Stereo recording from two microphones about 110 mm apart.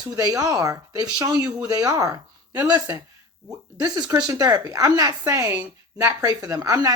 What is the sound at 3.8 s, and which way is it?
Speech, 35° right (ahead or behind).